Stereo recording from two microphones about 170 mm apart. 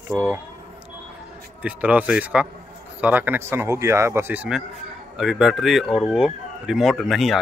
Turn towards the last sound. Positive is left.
turn(degrees=0)  # may be behind; listen again after turning